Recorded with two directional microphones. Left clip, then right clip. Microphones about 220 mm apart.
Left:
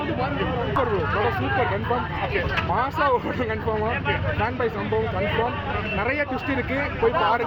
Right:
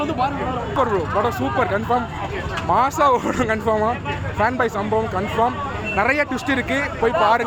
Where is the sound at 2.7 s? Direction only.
55° right (ahead or behind).